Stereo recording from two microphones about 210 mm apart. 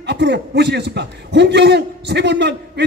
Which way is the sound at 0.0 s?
55° right (ahead or behind).